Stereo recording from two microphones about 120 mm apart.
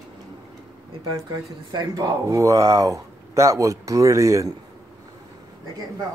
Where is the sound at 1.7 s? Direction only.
30° right (ahead or behind).